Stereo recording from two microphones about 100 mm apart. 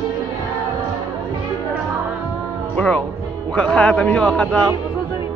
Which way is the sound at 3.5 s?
10° left (ahead or behind).